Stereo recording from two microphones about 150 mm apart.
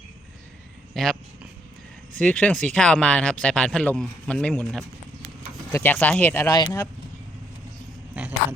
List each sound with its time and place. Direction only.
0.9 s speech: centre (ahead or behind)
2.1 s speech: 5° left (ahead or behind)
6.5 s speech: 25° left (ahead or behind)
8.1 s a sound: 10° right (ahead or behind)